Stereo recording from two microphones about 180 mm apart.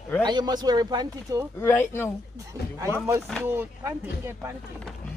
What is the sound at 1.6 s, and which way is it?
Speech, 10° left (ahead or behind).